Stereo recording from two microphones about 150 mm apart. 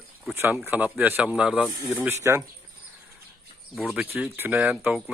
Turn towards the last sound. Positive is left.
turn(degrees=-5)  # may be behind; listen again after turning